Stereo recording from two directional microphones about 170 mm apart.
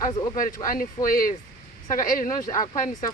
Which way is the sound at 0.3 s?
55° left (ahead or behind).